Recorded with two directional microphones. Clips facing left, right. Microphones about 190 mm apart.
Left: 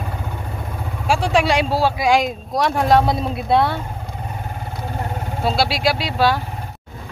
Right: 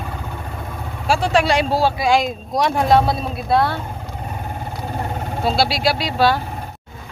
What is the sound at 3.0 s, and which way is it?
Speech, 20° left (ahead or behind).